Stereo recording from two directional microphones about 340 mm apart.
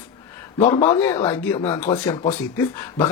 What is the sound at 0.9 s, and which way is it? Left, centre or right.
Speech, centre.